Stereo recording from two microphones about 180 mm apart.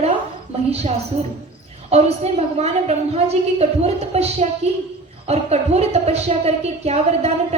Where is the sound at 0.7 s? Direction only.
35° right (ahead or behind).